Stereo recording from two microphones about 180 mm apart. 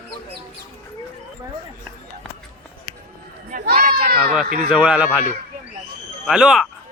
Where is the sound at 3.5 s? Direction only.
50° right (ahead or behind).